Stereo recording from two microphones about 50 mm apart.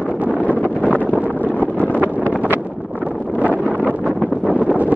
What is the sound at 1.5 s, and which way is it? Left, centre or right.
Wind noise, left.